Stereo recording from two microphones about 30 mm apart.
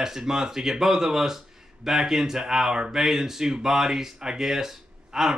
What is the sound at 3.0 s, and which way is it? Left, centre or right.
Speech, centre.